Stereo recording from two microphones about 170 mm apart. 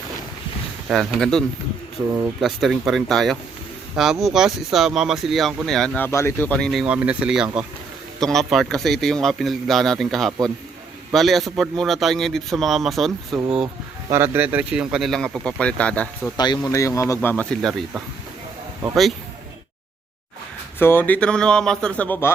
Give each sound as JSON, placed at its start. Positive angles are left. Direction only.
{"t": 0.9, "sound": "a man's voice", "side_deg": 0}
{"t": 6.1, "sound": "a man's voice", "side_deg": 15}
{"t": 16.6, "sound": "speech", "side_deg": 20}
{"t": 20.7, "sound": "speech", "side_deg": 10}